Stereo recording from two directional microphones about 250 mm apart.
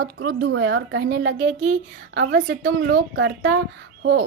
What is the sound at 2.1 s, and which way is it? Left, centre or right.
Speech, right.